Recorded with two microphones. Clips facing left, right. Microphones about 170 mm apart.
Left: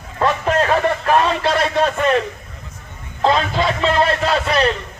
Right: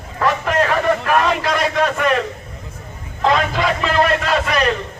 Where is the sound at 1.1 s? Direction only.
30° left (ahead or behind).